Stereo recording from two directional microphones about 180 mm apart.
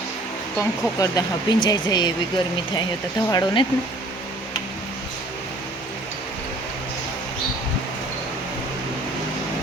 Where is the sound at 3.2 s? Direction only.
25° left (ahead or behind).